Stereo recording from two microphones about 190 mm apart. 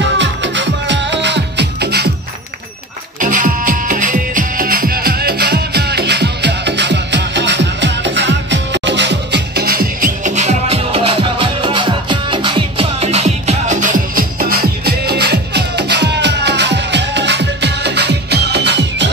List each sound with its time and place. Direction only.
0.2 s music: 70° right (ahead or behind)
3.2 s music: 45° right (ahead or behind); by 19.0 s 65° right (ahead or behind)